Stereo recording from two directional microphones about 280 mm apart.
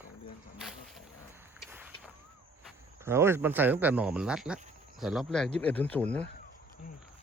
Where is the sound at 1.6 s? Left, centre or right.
Centre.